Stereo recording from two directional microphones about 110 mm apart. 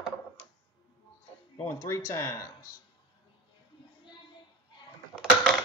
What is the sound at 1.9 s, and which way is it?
Speech, 30° left (ahead or behind).